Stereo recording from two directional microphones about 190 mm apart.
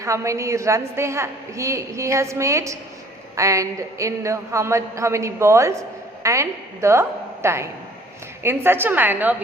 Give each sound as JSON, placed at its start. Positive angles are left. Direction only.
{"t": 0.0, "sound": "a woman's voice", "side_deg": -15}